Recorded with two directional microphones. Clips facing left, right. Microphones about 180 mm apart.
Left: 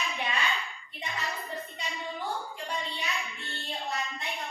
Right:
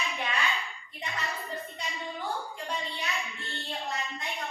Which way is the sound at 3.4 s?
15° right (ahead or behind).